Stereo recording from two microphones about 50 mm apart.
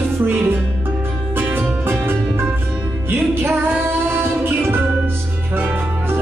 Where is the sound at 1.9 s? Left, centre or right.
Right.